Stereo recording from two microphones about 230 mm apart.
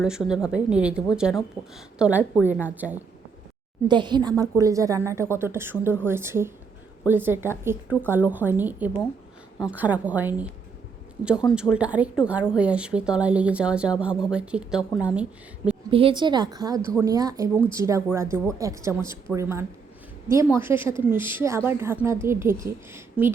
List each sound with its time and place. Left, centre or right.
0.0 s a woman's voice: centre
3.8 s a woman's voice: centre
11.4 s a woman's voice: centre
15.9 s a woman's voice: right